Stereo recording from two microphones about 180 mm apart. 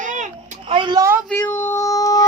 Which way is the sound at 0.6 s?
30° right (ahead or behind).